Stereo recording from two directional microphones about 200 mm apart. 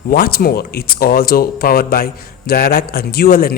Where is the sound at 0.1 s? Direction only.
50° left (ahead or behind).